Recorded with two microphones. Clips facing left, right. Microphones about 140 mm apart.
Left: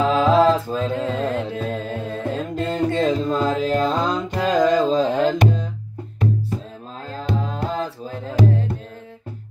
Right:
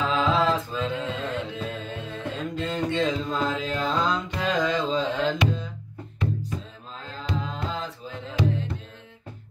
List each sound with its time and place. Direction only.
0.0 s music: 40° left (ahead or behind)
7.1 s music: 40° left (ahead or behind)